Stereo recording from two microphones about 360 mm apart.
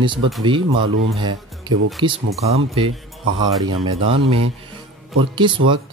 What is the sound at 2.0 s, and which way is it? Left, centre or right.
Speech, centre.